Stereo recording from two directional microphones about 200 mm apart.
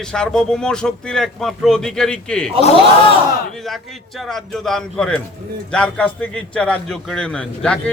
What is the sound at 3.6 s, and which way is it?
A man's voice, centre (ahead or behind).